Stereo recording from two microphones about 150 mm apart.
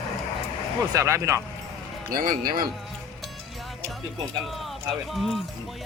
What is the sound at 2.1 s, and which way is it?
Speech, 70° right (ahead or behind).